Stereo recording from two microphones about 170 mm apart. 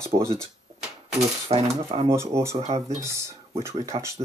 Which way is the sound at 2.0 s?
15° right (ahead or behind).